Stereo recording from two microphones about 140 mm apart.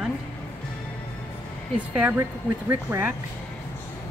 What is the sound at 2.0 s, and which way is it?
Speech, 15° right (ahead or behind).